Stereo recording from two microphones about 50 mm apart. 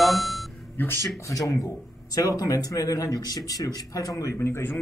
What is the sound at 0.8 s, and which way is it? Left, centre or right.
Speech, left.